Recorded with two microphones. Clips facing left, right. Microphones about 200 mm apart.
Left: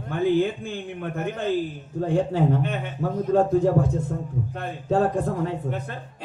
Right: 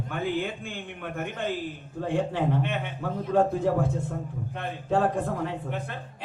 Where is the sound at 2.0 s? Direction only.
40° left (ahead or behind).